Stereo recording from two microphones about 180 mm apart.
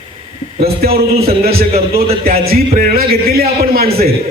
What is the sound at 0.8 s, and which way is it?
A man's voice, 55° right (ahead or behind).